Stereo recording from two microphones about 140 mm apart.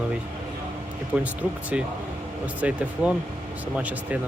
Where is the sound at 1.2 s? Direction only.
10° right (ahead or behind).